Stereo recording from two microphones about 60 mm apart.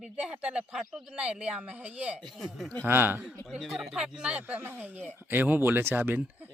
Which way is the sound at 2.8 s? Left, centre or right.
Right.